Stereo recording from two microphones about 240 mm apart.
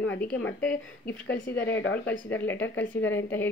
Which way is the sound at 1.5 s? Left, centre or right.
Left.